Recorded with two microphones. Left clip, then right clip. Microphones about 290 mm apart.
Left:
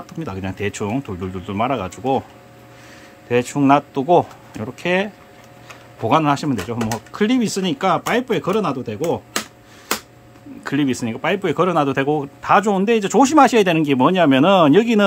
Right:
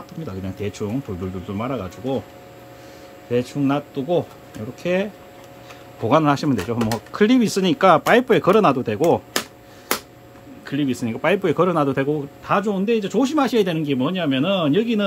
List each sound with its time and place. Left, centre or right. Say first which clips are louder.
0.2 s speech: left 4 dB; centre
3.3 s speech: left 6 dB; centre
10.6 s speech: left 3 dB; centre